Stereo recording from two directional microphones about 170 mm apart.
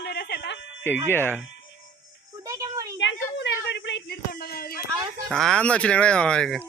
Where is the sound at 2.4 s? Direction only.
20° right (ahead or behind).